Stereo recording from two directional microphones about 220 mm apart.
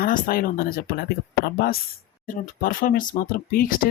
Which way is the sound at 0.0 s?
40° left (ahead or behind).